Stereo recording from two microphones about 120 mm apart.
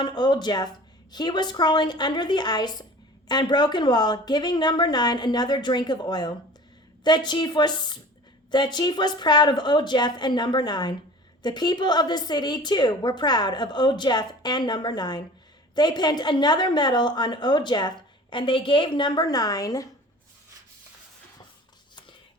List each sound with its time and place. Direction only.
0.0 s a woman's voice: 40° left (ahead or behind)